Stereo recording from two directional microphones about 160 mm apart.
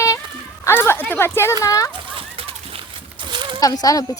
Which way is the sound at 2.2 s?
35° right (ahead or behind).